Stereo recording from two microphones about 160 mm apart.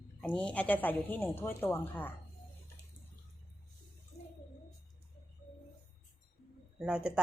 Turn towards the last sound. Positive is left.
turn(degrees=-5)  # may be behind; listen again after turning